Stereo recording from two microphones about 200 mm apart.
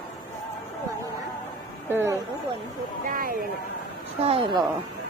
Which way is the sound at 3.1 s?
45° right (ahead or behind).